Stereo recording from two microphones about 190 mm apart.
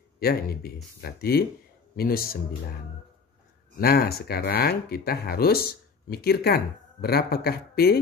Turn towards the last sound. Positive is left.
turn(degrees=55)  # may be behind; listen again after turning